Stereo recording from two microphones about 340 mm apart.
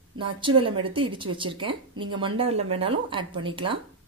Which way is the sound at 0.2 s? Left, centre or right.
Centre.